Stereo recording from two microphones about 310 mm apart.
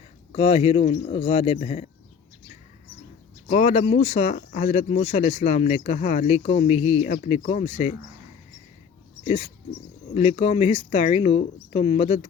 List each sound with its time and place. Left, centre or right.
0.3 s speech: centre
3.5 s speech: left
10.2 s speech: centre